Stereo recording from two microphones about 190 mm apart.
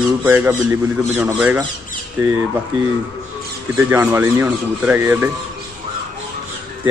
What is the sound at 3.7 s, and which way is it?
A man's voice, 15° right (ahead or behind).